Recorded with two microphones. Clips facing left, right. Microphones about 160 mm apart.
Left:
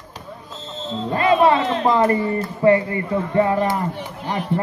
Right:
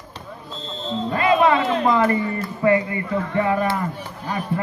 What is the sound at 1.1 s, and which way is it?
Speech, 35° left (ahead or behind).